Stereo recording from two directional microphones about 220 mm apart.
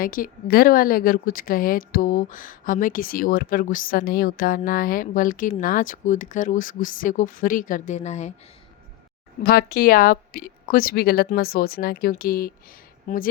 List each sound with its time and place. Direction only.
0.0 s speech: 40° left (ahead or behind)
9.4 s a woman's voice: 45° left (ahead or behind)